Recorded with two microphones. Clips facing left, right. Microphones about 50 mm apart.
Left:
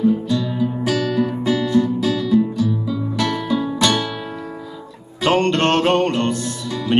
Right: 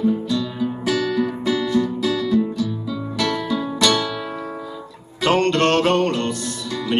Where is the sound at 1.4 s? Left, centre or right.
Left.